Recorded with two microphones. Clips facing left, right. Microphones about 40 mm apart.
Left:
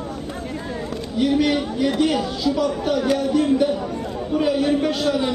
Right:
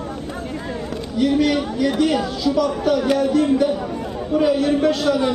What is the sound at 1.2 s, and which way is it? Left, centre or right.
A man's voice, centre.